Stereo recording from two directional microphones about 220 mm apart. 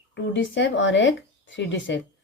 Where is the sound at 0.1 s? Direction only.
55° left (ahead or behind).